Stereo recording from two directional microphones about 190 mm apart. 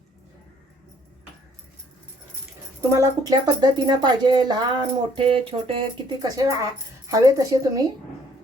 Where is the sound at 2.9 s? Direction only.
20° right (ahead or behind).